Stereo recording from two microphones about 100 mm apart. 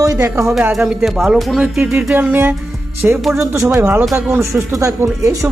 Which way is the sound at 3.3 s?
30° right (ahead or behind).